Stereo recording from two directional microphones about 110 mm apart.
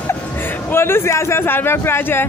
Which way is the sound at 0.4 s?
20° left (ahead or behind).